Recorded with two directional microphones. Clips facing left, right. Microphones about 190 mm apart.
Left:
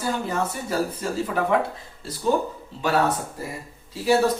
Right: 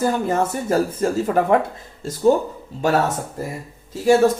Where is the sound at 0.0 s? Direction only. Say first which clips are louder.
Right 6 dB; 50° right (ahead or behind).